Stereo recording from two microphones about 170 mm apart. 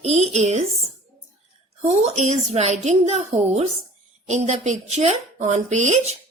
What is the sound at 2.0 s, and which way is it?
A woman's voice, 40° right (ahead or behind).